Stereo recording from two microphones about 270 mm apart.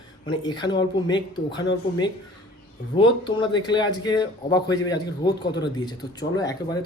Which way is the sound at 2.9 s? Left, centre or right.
Centre.